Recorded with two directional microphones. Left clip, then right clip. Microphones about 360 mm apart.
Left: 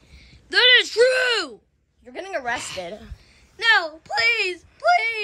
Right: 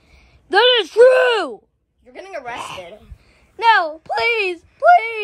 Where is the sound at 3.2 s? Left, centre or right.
Centre.